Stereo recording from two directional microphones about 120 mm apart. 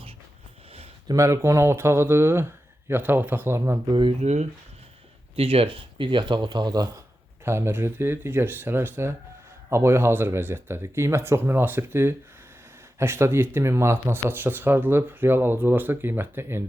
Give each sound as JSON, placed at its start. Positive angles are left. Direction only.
{"t": 1.0, "sound": "speech", "side_deg": -25}
{"t": 4.2, "sound": "speech", "side_deg": -65}
{"t": 5.4, "sound": "speech", "side_deg": -55}
{"t": 7.4, "sound": "speech", "side_deg": -20}